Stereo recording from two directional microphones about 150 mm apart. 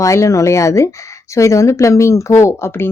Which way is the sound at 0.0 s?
20° left (ahead or behind).